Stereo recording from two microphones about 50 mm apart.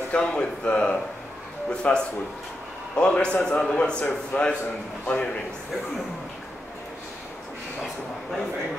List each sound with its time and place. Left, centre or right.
0.2 s speech: centre